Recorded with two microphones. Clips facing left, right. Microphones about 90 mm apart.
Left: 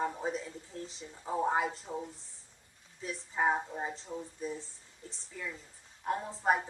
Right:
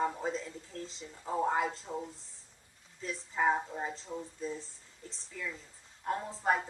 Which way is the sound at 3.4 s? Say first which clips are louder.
Right 1 dB; 15° left (ahead or behind).